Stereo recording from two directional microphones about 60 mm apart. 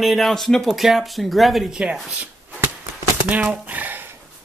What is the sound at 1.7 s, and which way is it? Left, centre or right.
Speech, centre.